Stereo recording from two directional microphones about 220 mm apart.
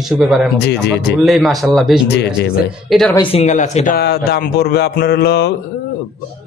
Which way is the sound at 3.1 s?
25° left (ahead or behind).